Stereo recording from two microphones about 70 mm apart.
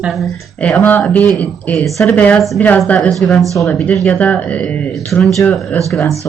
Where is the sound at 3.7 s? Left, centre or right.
Centre.